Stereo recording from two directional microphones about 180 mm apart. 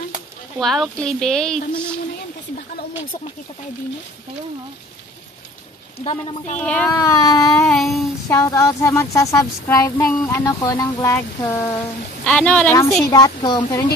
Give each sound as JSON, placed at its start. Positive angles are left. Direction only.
{"t": 0.6, "sound": "speech", "side_deg": 0}
{"t": 6.0, "sound": "speech", "side_deg": 35}
{"t": 6.6, "sound": "speech", "side_deg": 5}
{"t": 6.9, "sound": "speech", "side_deg": 15}
{"t": 7.6, "sound": "speech", "side_deg": 0}
{"t": 8.3, "sound": "speech", "side_deg": 15}
{"t": 13.0, "sound": "speech", "side_deg": 20}